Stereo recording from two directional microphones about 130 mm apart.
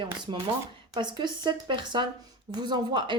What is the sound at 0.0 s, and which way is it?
Speech, 35° right (ahead or behind).